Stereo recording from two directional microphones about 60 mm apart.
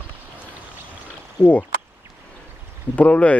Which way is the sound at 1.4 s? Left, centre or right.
Left.